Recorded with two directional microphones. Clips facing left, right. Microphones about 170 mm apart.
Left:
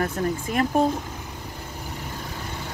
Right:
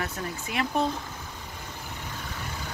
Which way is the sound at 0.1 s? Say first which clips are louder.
Left 8 dB; 40° left (ahead or behind).